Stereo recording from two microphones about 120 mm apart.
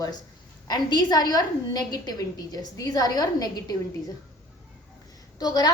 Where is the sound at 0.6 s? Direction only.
35° left (ahead or behind).